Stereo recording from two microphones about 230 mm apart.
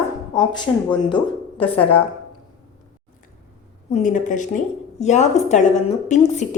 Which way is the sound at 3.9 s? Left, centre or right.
Left.